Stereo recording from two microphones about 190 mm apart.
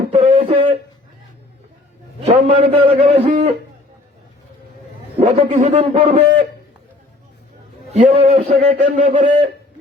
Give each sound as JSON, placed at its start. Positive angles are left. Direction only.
{"t": 0.1, "sound": "a sound", "side_deg": -30}
{"t": 2.2, "sound": "a man's voice", "side_deg": -30}
{"t": 5.2, "sound": "a man's voice", "side_deg": -35}
{"t": 7.9, "sound": "a man's voice", "side_deg": -35}